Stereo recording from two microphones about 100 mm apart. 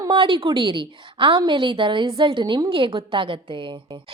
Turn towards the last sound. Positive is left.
turn(degrees=-55)  # may be behind; listen again after turning